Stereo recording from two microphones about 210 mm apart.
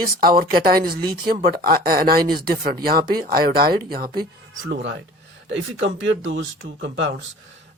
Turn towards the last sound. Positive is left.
turn(degrees=-60)  # may be behind; listen again after turning